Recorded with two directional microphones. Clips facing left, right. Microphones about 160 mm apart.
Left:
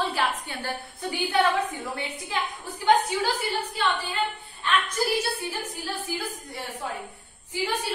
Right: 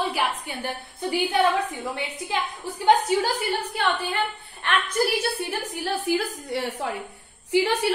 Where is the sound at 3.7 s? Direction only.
65° right (ahead or behind).